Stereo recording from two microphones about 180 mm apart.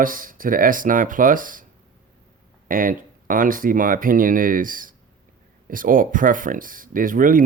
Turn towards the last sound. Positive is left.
turn(degrees=-50)  # may be behind; listen again after turning